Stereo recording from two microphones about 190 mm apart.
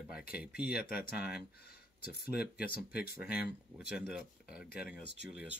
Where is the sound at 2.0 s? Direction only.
55° left (ahead or behind).